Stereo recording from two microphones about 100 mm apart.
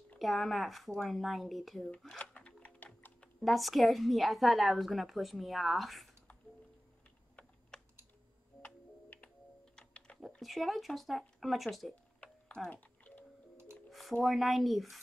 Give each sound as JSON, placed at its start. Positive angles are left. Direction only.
{"t": 0.2, "sound": "speech", "side_deg": 0}
{"t": 1.9, "sound": "typing", "side_deg": 10}
{"t": 3.3, "sound": "speech", "side_deg": 0}
{"t": 8.6, "sound": "computer keyboard", "side_deg": 15}
{"t": 9.8, "sound": "typing", "side_deg": 10}
{"t": 10.2, "sound": "speech", "side_deg": 0}
{"t": 11.9, "sound": "music", "side_deg": 10}
{"t": 13.8, "sound": "speech", "side_deg": 0}